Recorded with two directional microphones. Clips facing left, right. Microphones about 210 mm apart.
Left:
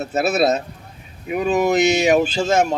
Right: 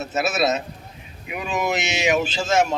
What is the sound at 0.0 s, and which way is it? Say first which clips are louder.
Speech: left 4 dB; 35° left (ahead or behind).